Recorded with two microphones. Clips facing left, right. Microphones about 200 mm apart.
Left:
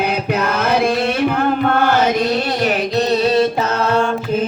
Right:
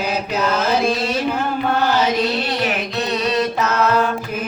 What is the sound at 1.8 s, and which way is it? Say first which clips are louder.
Chant: left 2 dB; 55° left (ahead or behind).